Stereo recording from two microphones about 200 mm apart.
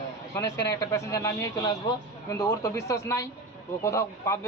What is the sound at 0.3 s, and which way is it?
A man's voice, 15° left (ahead or behind).